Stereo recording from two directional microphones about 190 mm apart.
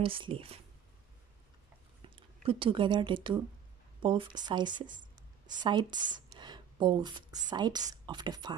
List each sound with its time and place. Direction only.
0.0 s speech: 30° right (ahead or behind)
2.0 s speech: 30° right (ahead or behind)
6.1 s a sound: 20° right (ahead or behind)
7.4 s speech: 20° right (ahead or behind)